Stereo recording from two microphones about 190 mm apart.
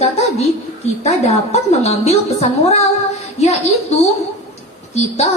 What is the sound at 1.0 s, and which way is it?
A woman's voice, 35° left (ahead or behind).